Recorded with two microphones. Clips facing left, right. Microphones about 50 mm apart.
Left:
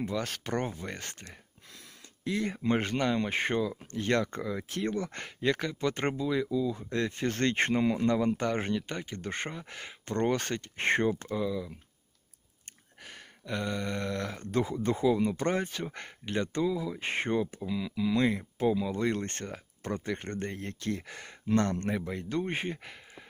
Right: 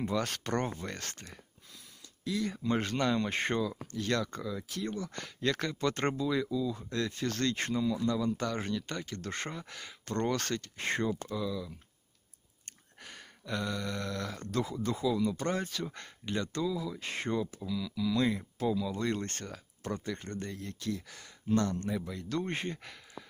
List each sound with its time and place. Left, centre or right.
0.0 s speech: centre
2.2 s speech: left
2.9 s speech: centre
3.9 s speech: left
5.4 s speech: centre; by 8.4 s left
8.4 s speech: left
10.8 s speech: left
12.6 s a sound: centre; by 16.1 s left
16.3 s speech: left
22.0 s speech: left
22.3 s speech: centre